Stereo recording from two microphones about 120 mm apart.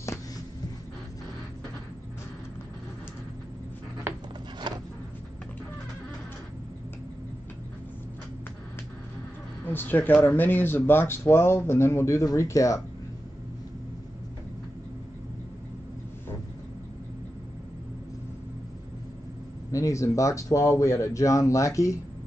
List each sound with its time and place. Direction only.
4.7 s a sound: 40° right (ahead or behind)
9.7 s speech: 15° left (ahead or behind)
19.7 s speech: 25° left (ahead or behind)